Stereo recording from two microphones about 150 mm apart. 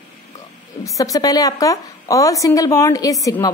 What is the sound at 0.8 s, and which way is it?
A woman's voice, 20° left (ahead or behind).